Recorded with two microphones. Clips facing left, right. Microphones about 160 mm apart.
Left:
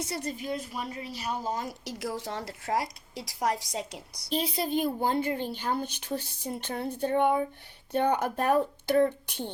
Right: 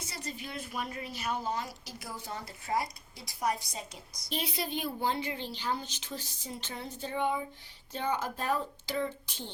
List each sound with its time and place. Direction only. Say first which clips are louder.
0.1 s a woman's voice: left 8 dB; 55° left (ahead or behind)
1.8 s a woman's voice: left 9 dB; 85° left
4.3 s a woman's voice: left 6 dB; 35° left (ahead or behind); by 9.3 s 60° left (ahead or behind)